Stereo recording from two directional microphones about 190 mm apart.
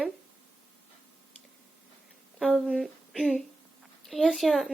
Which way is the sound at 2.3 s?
Centre (ahead or behind).